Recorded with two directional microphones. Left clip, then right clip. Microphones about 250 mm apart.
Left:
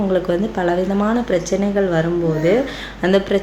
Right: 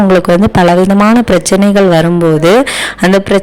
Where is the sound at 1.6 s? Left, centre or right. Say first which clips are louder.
Right 10 dB; right.